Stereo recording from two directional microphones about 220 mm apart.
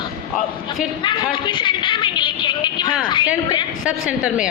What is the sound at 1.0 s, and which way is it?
Speech, 20° left (ahead or behind).